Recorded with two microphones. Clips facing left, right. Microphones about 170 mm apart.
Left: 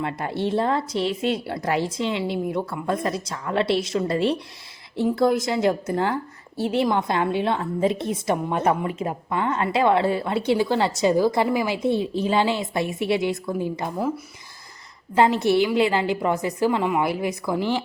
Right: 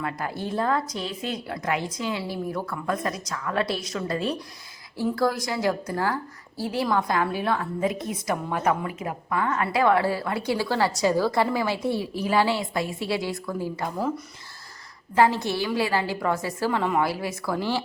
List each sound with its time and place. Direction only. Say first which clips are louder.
0.0 s a woman's voice: left 5 dB; 25° left (ahead or behind)
15.1 s a woman's voice: left 3 dB; 20° left (ahead or behind)